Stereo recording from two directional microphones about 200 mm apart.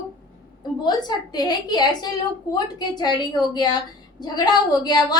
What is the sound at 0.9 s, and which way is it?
A woman's voice, 20° left (ahead or behind).